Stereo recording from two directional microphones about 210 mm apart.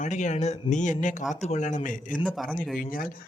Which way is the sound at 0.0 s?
35° left (ahead or behind).